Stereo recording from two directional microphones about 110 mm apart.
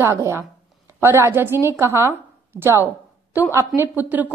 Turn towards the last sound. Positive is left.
turn(degrees=-15)  # may be behind; listen again after turning